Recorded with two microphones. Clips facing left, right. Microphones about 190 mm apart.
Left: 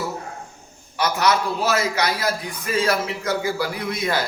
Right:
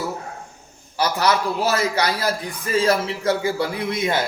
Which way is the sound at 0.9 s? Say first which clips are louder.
Even; 30° right (ahead or behind).